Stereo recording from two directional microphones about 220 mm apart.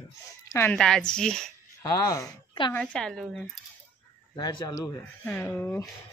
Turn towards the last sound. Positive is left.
turn(degrees=10)  # may be behind; listen again after turning